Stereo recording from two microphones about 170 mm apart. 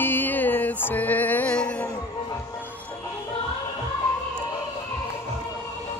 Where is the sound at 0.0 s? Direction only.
10° left (ahead or behind).